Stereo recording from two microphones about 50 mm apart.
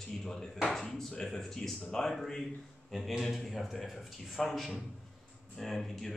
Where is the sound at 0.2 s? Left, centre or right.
Centre.